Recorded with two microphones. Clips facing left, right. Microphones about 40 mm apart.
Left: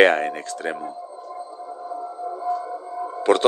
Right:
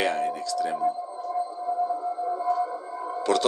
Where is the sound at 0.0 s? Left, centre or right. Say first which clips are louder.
Left 9 dB; left.